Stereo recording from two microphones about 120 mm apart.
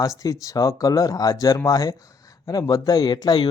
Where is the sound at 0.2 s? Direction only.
30° left (ahead or behind).